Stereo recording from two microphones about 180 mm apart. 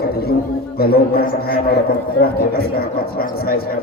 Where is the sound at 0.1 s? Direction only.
60° left (ahead or behind).